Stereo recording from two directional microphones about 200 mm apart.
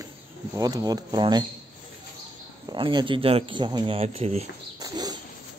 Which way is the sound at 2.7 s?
20° right (ahead or behind).